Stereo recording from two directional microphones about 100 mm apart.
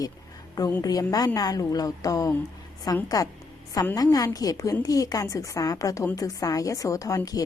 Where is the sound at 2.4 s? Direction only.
40° left (ahead or behind).